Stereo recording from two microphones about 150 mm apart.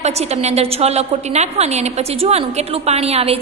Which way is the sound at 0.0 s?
45° right (ahead or behind).